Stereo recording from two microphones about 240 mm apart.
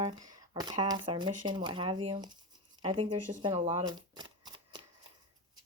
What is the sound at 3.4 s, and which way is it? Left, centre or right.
Shuffling cards, right.